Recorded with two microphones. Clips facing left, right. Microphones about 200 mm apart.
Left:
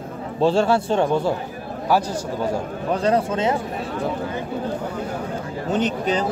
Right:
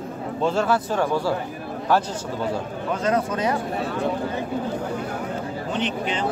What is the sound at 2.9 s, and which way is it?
Speech, 30° left (ahead or behind).